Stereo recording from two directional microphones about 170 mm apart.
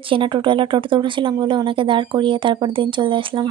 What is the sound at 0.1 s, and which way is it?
A woman's voice, 30° right (ahead or behind).